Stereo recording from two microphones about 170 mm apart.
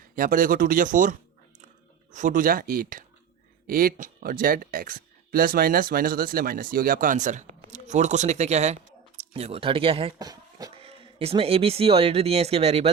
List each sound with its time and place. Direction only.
0.2 s speech: 55° right (ahead or behind)
2.1 s speech: 50° right (ahead or behind); by 10.1 s 35° right (ahead or behind)
10.2 s speech: 20° right (ahead or behind)
10.8 s speech: 35° right (ahead or behind)